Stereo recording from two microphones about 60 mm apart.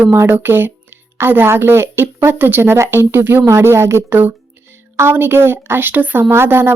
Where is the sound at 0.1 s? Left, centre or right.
Right.